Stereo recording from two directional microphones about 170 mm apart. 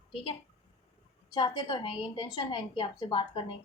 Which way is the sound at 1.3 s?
25° left (ahead or behind).